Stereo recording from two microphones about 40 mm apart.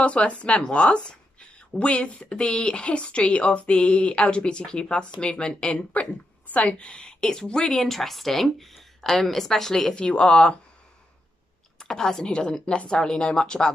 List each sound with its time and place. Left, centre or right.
0.0 s speech: left
7.9 s a woman's voice: centre
9.9 s speech: left
11.8 s speech: centre